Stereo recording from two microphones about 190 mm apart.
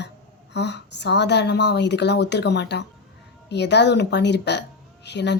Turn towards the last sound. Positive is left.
turn(degrees=65)  # may be behind; listen again after turning